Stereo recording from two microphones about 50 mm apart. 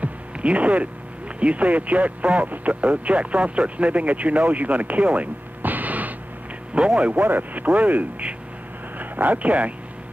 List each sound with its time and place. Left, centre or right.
0.0 s a sound: right
1.4 s speech: right
6.8 s speech: centre
7.2 s speech: right